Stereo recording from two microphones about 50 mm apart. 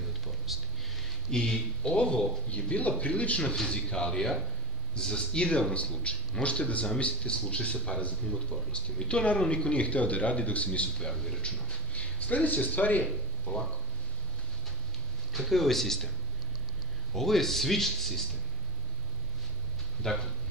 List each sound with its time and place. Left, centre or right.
0.5 s speech: centre
1.3 s a man's voice: centre
11.0 s a man's voice: centre
11.9 s speech: left
13.0 s speech: centre
15.3 s speech: centre
17.1 s speech: centre
20.0 s a man's voice: centre